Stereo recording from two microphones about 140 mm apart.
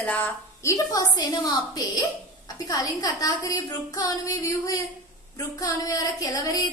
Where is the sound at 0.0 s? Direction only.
15° left (ahead or behind).